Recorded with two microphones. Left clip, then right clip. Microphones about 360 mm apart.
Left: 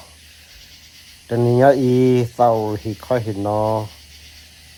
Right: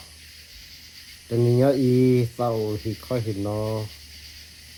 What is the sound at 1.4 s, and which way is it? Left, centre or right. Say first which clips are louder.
Speech: left 7 dB; left.